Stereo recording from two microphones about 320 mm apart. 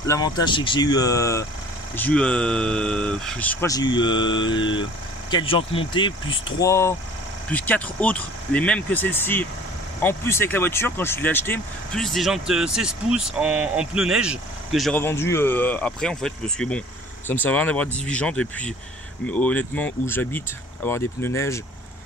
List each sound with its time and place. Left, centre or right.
0.0 s speech: centre